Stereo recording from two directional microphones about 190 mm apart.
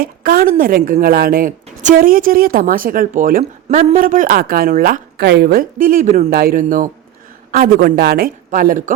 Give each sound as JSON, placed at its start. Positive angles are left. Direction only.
{"t": 0.0, "sound": "a woman's voice", "side_deg": -50}
{"t": 6.3, "sound": "a woman's voice", "side_deg": -50}